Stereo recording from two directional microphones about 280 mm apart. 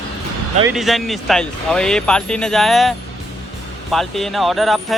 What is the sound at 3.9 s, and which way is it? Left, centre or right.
Speech, centre.